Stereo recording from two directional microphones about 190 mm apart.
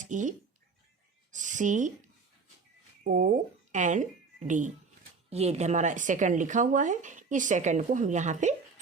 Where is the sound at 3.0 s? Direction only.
45° right (ahead or behind).